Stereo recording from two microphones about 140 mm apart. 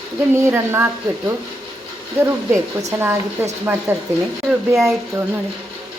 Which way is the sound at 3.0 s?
20° right (ahead or behind).